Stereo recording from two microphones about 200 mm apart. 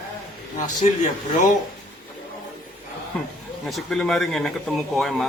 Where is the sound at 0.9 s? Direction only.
35° left (ahead or behind).